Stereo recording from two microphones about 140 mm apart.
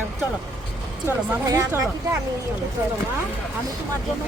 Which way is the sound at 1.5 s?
20° right (ahead or behind).